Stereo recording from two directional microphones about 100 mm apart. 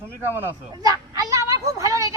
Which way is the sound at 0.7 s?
40° right (ahead or behind).